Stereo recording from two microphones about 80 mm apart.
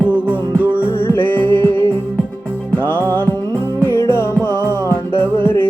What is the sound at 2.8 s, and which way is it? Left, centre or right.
Music, left.